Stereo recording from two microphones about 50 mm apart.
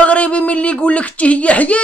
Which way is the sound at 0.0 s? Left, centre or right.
Left.